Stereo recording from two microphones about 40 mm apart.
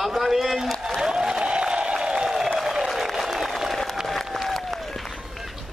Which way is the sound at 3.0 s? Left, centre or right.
Centre.